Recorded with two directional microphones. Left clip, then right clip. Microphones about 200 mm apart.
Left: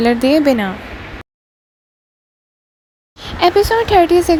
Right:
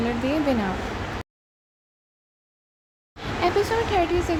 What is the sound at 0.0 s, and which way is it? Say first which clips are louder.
Speech: left 12 dB; 45° left (ahead or behind).